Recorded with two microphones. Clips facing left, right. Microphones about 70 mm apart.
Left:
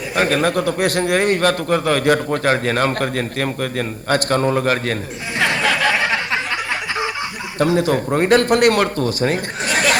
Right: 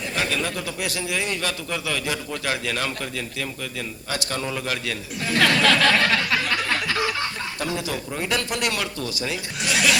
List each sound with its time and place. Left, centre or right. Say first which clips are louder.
0.2 s a man's voice: left 10 dB; left
5.3 s a sound: even; left
7.8 s a man's voice: left 11 dB; left